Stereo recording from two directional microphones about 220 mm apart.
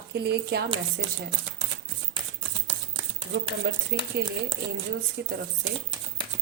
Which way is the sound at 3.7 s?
45° right (ahead or behind).